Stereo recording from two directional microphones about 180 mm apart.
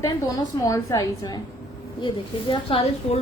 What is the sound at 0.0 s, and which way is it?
A woman's voice, 20° left (ahead or behind).